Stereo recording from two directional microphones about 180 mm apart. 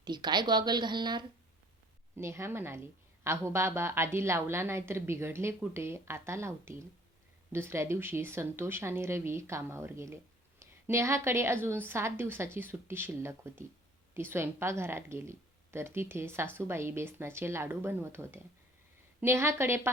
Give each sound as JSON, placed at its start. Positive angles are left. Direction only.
{"t": 0.0, "sound": "a woman's voice", "side_deg": -25}
{"t": 2.1, "sound": "a woman's voice", "side_deg": -15}